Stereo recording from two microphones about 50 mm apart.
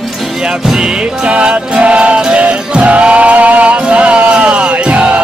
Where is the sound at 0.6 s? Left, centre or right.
Centre.